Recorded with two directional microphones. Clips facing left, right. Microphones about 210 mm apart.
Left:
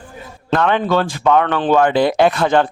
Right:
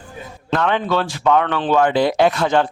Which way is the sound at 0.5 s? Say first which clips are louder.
Left 3 dB; 55° left (ahead or behind).